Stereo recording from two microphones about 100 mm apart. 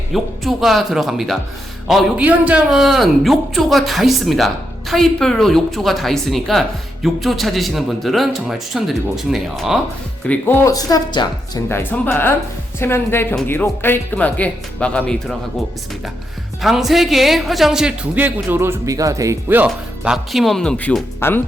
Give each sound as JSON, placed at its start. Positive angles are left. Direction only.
{"t": 0.1, "sound": "speech", "side_deg": 0}
{"t": 2.1, "sound": "speech", "side_deg": -15}
{"t": 10.2, "sound": "speech", "side_deg": 25}
{"t": 10.7, "sound": "a woman's voice", "side_deg": 40}
{"t": 11.7, "sound": "speech", "side_deg": 20}
{"t": 16.6, "sound": "speech", "side_deg": 0}
{"t": 18.1, "sound": "speech", "side_deg": -15}
{"t": 19.5, "sound": "speech", "side_deg": -15}
{"t": 21.2, "sound": "speech", "side_deg": 25}